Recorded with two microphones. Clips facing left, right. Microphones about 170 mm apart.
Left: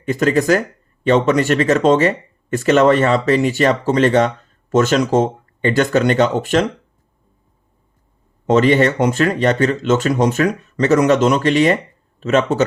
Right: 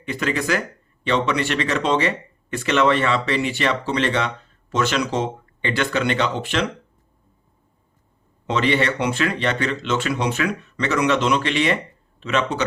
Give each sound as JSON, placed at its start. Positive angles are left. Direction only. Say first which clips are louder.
{"t": 0.0, "sound": "speech", "louder": "left 8 dB", "side_deg": 45}
{"t": 8.4, "sound": "speech", "louder": "left 8 dB", "side_deg": 45}